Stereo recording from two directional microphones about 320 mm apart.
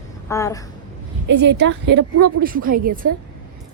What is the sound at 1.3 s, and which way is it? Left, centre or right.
A woman's voice, right.